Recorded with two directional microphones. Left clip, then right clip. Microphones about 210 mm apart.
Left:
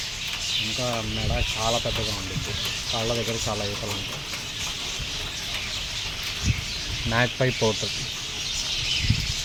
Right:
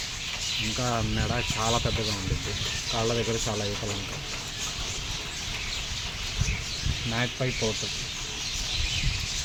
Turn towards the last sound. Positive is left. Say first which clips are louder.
# left 6 dB
turn(degrees=30)  # may be behind; listen again after turning